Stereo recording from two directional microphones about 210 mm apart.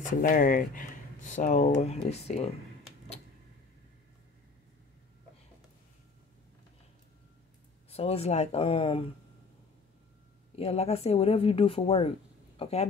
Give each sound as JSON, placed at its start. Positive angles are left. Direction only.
{"t": 0.2, "sound": "speech", "side_deg": 40}
{"t": 7.9, "sound": "speech", "side_deg": 30}
{"t": 10.5, "sound": "speech", "side_deg": 30}